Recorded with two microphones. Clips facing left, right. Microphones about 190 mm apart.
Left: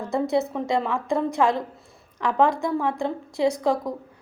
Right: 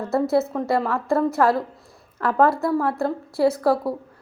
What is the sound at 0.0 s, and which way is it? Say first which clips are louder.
A woman's voice: right 3 dB; 5° right (ahead or behind).